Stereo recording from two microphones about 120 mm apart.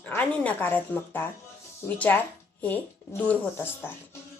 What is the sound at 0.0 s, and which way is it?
A woman's voice, 10° left (ahead or behind).